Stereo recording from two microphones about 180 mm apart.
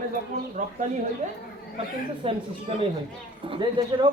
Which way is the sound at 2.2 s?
30° right (ahead or behind).